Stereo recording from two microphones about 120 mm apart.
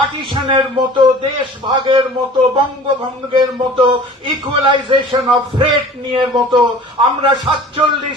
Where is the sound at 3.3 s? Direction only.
45° right (ahead or behind).